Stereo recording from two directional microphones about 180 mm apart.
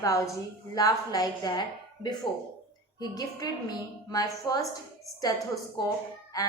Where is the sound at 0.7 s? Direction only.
20° left (ahead or behind).